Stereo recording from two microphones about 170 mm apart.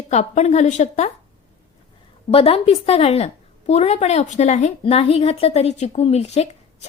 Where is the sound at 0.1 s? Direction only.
40° left (ahead or behind).